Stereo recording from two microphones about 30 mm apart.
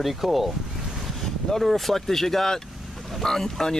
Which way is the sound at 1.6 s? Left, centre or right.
Centre.